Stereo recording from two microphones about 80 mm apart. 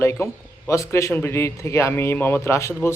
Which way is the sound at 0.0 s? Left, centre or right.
Left.